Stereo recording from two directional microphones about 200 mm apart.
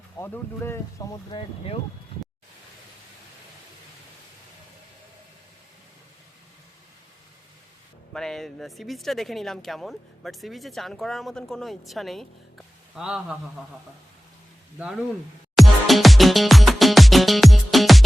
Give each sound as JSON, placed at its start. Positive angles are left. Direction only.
{"t": 0.2, "sound": "speech", "side_deg": 10}
{"t": 1.3, "sound": "speech", "side_deg": 30}
{"t": 8.1, "sound": "speech", "side_deg": 0}
{"t": 15.5, "sound": "music", "side_deg": 0}